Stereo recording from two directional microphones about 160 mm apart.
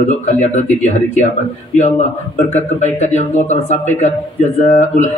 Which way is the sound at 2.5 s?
45° left (ahead or behind).